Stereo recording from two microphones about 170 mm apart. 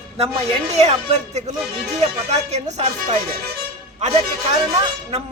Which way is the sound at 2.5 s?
40° right (ahead or behind).